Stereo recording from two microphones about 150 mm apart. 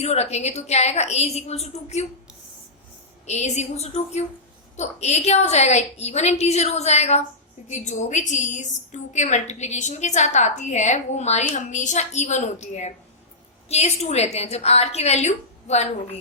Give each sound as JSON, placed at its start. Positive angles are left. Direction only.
{"t": 0.0, "sound": "a woman's voice", "side_deg": 45}
{"t": 3.2, "sound": "a woman's voice", "side_deg": 50}